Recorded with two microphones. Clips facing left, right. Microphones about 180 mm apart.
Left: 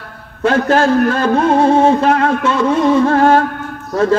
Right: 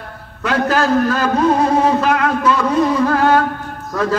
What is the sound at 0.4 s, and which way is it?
A man's voice, 30° left (ahead or behind).